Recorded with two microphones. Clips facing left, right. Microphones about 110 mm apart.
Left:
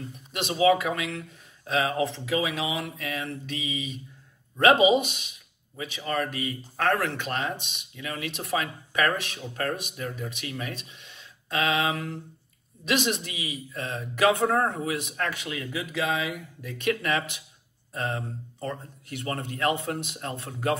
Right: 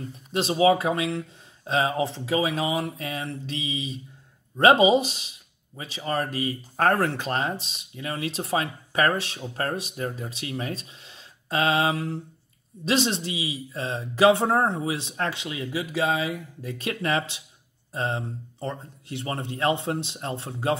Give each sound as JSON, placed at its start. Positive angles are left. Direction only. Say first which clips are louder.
{"t": 0.1, "sound": "speech", "louder": "right 7 dB", "side_deg": -30}